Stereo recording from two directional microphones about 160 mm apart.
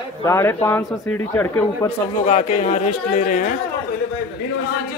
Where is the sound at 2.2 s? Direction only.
45° left (ahead or behind).